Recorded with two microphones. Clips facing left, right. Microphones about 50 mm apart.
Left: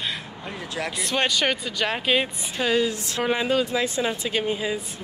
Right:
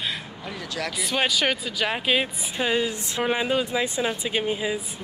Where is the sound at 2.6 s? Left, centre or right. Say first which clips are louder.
Left 3 dB; centre.